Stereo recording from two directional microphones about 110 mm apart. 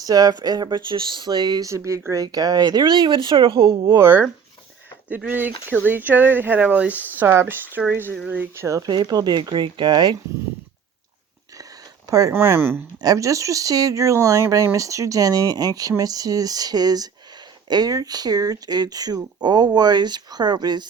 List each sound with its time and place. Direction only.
0.0 s speech: 35° right (ahead or behind)
3.9 s speech: 20° right (ahead or behind)
8.5 s speech: 25° right (ahead or behind)
8.9 s speech: 40° right (ahead or behind)
12.3 s speech: 20° right (ahead or behind)
13.0 s speech: 30° right (ahead or behind)